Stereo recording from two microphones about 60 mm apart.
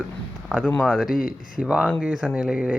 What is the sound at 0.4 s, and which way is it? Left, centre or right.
Speech, centre.